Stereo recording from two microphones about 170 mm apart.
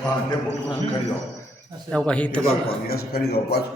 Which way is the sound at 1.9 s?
5° left (ahead or behind).